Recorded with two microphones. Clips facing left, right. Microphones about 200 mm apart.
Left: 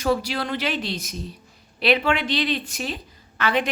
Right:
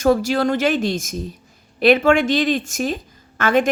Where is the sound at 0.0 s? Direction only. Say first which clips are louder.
Right 7 dB; 45° right (ahead or behind).